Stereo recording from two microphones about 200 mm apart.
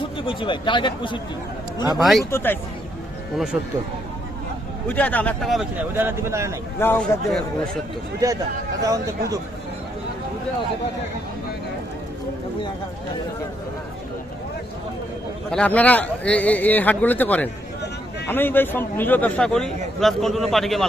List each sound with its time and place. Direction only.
0.2 s speech: 25° left (ahead or behind)
2.0 s a man's voice: centre (ahead or behind)
2.3 s a man's voice: 10° left (ahead or behind)
3.3 s a man's voice: 5° right (ahead or behind)
4.9 s a man's voice: 10° left (ahead or behind)
6.1 s speech: 15° right (ahead or behind)
6.7 s a man's voice: 10° left (ahead or behind)
8.2 s speech: 15° right (ahead or behind)
15.4 s a man's voice: 5° left (ahead or behind)